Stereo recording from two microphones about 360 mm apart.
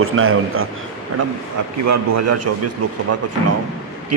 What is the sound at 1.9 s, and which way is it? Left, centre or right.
Speech, right.